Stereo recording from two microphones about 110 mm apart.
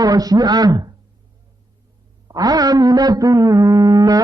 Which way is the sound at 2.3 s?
35° right (ahead or behind).